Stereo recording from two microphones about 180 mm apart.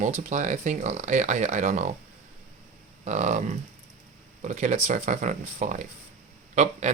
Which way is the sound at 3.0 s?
40° right (ahead or behind).